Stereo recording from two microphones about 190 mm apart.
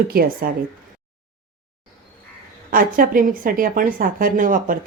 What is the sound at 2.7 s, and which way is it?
Speech, 50° right (ahead or behind).